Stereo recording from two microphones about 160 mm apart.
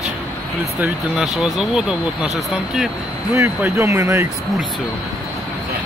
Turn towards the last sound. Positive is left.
turn(degrees=-15)  # may be behind; listen again after turning